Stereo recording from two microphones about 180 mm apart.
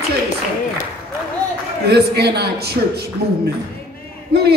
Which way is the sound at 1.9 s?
65° right (ahead or behind).